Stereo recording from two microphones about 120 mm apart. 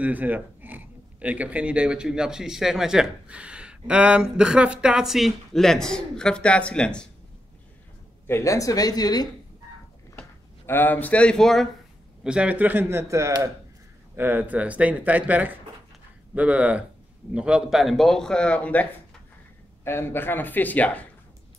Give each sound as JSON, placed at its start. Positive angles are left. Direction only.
{"t": 0.0, "sound": "speech", "side_deg": -15}
{"t": 8.3, "sound": "speech", "side_deg": 25}
{"t": 10.7, "sound": "speech", "side_deg": 15}
{"t": 12.2, "sound": "speech", "side_deg": -10}